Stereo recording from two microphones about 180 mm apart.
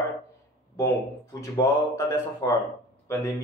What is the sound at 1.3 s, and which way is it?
Speech, 15° left (ahead or behind).